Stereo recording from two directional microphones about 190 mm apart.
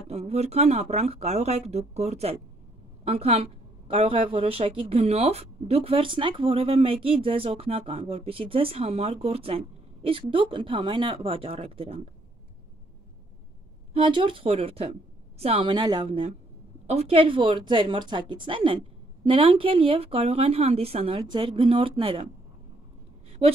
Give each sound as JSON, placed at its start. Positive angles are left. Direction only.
{"t": 0.1, "sound": "a woman's voice", "side_deg": -35}
{"t": 13.9, "sound": "a woman's voice", "side_deg": -25}